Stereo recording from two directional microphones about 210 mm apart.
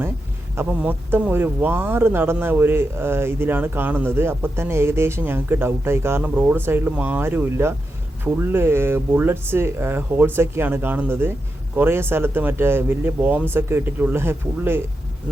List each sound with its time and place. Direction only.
0.5 s speech: 10° right (ahead or behind)